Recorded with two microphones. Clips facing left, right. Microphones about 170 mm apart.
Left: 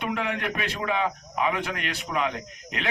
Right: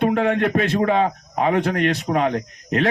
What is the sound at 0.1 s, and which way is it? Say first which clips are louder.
A man's voice: right 10 dB; 55° right (ahead or behind).